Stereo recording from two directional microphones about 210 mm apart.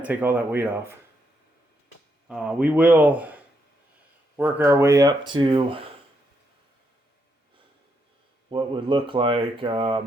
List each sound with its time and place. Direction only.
0.0 s speech: 10° right (ahead or behind)
2.2 s speech: 5° right (ahead or behind); by 5.9 s 25° right (ahead or behind)
8.4 s speech: 25° right (ahead or behind)